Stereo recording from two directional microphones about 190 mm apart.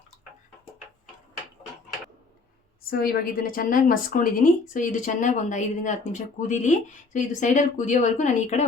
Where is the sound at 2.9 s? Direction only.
50° left (ahead or behind).